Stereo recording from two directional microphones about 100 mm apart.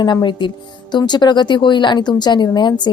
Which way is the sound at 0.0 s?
50° left (ahead or behind).